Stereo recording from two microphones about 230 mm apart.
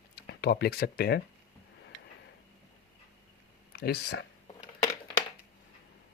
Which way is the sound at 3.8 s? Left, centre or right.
Left.